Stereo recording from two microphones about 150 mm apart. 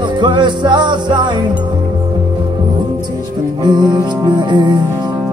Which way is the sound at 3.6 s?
30° right (ahead or behind).